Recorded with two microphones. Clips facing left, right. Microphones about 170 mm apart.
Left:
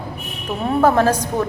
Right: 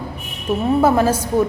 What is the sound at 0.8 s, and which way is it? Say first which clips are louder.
Speech: left 2 dB; 10° right (ahead or behind).